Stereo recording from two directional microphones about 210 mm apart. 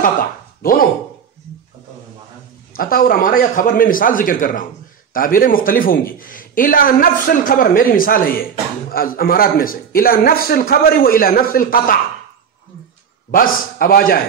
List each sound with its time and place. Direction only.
0.6 s speech: 45° left (ahead or behind)
2.7 s a man's voice: 45° left (ahead or behind)
13.3 s a man's voice: 45° left (ahead or behind)